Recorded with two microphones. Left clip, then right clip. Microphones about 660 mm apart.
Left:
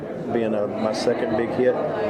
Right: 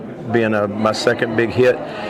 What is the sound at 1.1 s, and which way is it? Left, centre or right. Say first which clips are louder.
Speech: right 4 dB; right.